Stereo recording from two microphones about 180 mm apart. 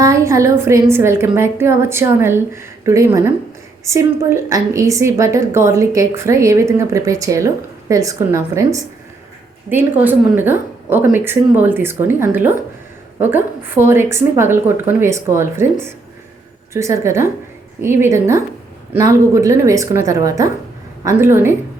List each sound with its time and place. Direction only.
0.0 s a woman's voice: 15° right (ahead or behind)